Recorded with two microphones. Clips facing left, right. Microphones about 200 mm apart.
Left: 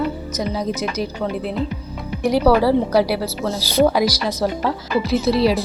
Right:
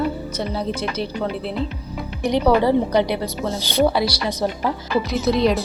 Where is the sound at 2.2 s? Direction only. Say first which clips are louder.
Left 2 dB; 5° left (ahead or behind).